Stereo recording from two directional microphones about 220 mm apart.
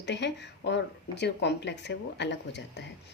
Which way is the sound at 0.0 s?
50° left (ahead or behind).